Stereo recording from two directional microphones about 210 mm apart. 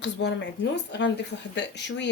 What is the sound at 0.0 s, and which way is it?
A woman's voice, 55° left (ahead or behind).